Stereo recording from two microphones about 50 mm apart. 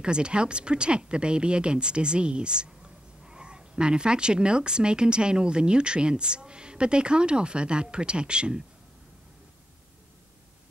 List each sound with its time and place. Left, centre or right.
0.0 s speech: centre